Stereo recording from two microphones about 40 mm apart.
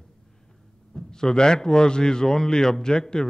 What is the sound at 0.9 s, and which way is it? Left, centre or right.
A man's voice, centre.